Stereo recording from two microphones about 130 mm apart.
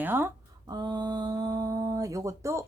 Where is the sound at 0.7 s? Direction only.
30° right (ahead or behind).